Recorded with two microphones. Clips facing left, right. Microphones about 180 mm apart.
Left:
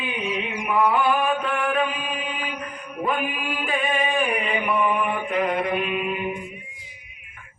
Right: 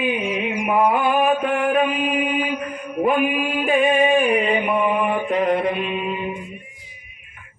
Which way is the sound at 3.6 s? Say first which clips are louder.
Right 8 dB; 25° right (ahead or behind).